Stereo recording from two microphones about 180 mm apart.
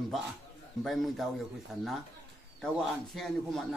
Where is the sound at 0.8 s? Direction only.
Centre (ahead or behind).